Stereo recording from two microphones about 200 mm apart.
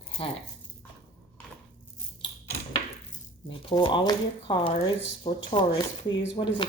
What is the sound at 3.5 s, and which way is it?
Speech, 25° left (ahead or behind).